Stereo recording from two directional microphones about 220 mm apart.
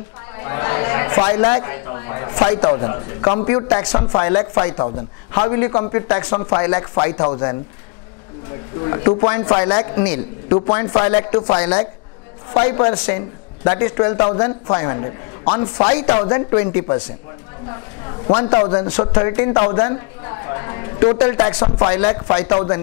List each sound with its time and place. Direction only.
0.4 s a man's voice: 20° left (ahead or behind)
8.7 s a man's voice: 20° left (ahead or behind)